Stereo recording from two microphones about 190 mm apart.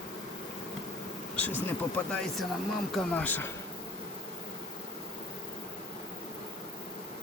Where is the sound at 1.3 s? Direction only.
10° left (ahead or behind).